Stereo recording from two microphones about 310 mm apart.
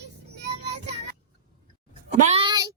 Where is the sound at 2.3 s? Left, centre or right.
Centre.